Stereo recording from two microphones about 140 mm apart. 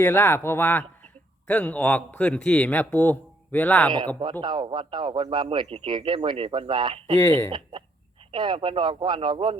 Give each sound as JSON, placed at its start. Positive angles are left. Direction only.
{"t": 0.0, "sound": "a man's voice", "side_deg": 15}
{"t": 4.2, "sound": "speech", "side_deg": -35}
{"t": 7.2, "sound": "a man's voice", "side_deg": 15}
{"t": 7.5, "sound": "speech", "side_deg": -40}